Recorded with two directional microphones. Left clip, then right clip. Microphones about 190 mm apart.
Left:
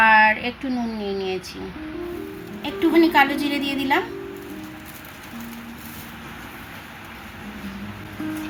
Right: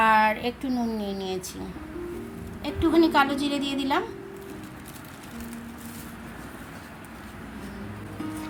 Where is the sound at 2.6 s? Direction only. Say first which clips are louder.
Left 4 dB; 15° right (ahead or behind).